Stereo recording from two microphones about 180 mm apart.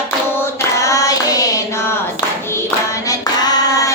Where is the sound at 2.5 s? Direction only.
15° left (ahead or behind).